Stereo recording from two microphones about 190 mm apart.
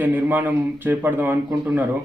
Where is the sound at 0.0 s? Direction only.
10° right (ahead or behind).